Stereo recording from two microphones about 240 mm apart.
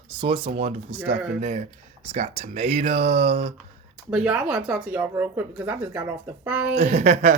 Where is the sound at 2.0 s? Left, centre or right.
Right.